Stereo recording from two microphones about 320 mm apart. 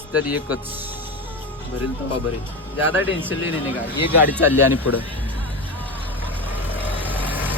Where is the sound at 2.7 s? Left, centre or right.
Centre.